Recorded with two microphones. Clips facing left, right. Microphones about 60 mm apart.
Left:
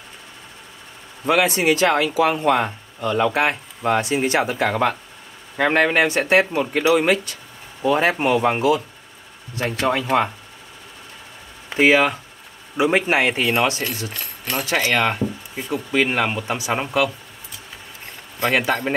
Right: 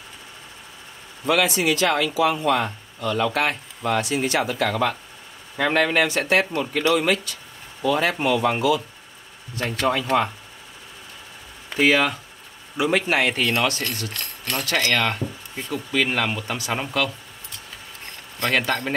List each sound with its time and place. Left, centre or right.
1.2 s speech: left
9.6 s speech: centre
11.7 s speech: centre
14.1 s speech: centre
14.7 s speech: centre
18.0 s a sound: centre